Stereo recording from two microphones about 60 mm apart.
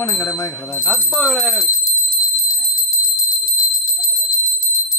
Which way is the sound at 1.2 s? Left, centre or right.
Centre.